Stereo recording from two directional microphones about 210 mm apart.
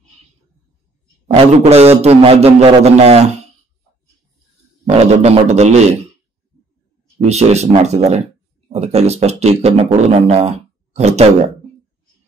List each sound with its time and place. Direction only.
1.2 s a man's voice: 30° right (ahead or behind)
4.9 s speech: 30° right (ahead or behind)
7.2 s speech: 30° right (ahead or behind)